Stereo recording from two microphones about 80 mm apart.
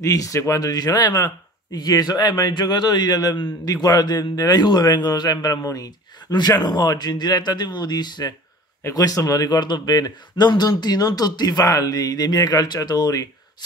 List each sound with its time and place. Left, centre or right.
0.0 s speech: left
8.9 s speech: left